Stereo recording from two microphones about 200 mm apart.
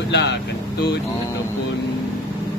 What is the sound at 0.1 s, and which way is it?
Speech, 60° left (ahead or behind).